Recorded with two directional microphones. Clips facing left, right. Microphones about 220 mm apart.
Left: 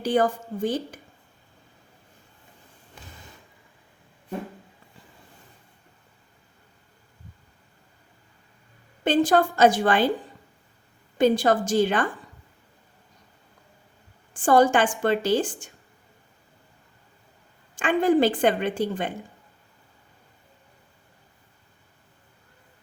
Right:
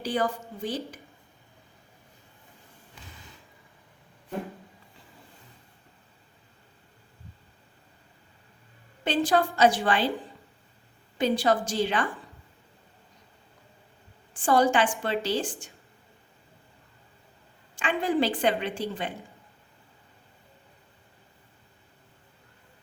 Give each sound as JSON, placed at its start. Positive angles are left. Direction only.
{"t": 0.0, "sound": "a woman's voice", "side_deg": 50}
{"t": 9.0, "sound": "a woman's voice", "side_deg": 50}
{"t": 11.2, "sound": "a woman's voice", "side_deg": 50}
{"t": 14.3, "sound": "a woman's voice", "side_deg": 50}
{"t": 17.7, "sound": "a woman's voice", "side_deg": 50}